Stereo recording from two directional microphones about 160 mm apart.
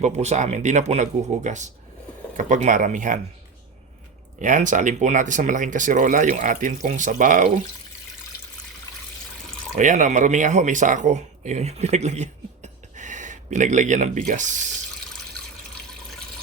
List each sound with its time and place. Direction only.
0.0 s speech: 45° right (ahead or behind)
4.4 s speech: 50° right (ahead or behind)
9.7 s speech: 50° right (ahead or behind)